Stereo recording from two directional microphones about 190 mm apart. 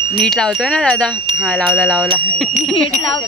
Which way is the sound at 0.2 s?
Centre (ahead or behind).